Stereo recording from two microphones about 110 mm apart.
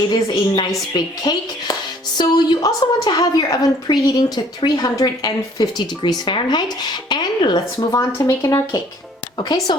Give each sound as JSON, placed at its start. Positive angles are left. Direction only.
{"t": 0.1, "sound": "a woman's voice", "side_deg": 40}
{"t": 7.1, "sound": "a sound", "side_deg": 45}
{"t": 7.9, "sound": "a woman's voice", "side_deg": 30}